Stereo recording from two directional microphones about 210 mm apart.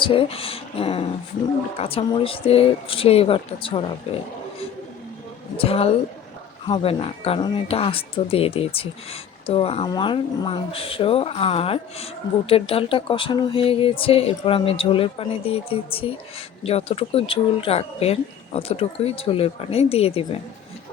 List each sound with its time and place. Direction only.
0.0 s speech: 25° left (ahead or behind)
5.5 s speech: 25° left (ahead or behind)